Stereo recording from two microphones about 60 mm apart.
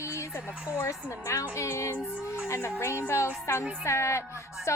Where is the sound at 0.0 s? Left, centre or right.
Left.